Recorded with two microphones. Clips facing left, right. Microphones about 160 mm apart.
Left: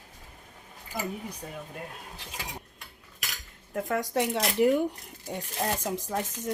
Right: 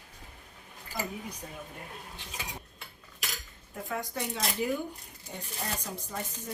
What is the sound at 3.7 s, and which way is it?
Speech, 80° left.